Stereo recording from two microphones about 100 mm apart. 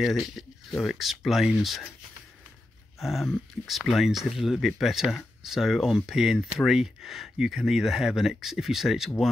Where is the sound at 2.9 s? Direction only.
Centre (ahead or behind).